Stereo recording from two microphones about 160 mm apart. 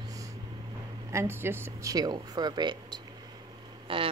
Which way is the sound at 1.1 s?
15° right (ahead or behind).